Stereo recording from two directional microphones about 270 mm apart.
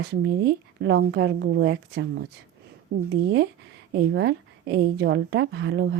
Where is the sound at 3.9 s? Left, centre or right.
Right.